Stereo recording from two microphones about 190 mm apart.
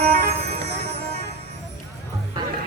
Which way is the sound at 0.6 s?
35° right (ahead or behind).